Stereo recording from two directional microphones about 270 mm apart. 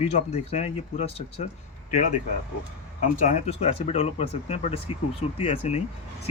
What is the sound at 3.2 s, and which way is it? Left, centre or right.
Speech, left.